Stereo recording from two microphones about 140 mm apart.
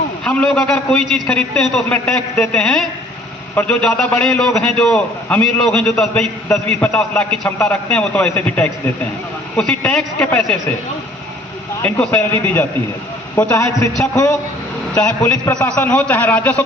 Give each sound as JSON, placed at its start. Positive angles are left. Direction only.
{"t": 0.3, "sound": "a man's voice", "side_deg": 10}
{"t": 6.1, "sound": "a man's voice", "side_deg": 15}
{"t": 11.8, "sound": "a man's voice", "side_deg": 10}
{"t": 14.9, "sound": "a man's voice", "side_deg": 10}